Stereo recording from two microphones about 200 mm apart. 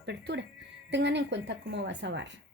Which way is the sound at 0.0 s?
60° right (ahead or behind).